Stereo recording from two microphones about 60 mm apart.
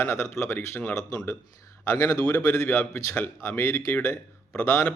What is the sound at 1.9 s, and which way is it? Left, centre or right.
Speech, left.